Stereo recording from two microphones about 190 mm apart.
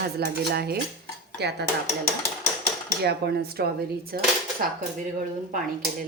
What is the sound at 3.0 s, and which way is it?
Cutlery, 55° right (ahead or behind).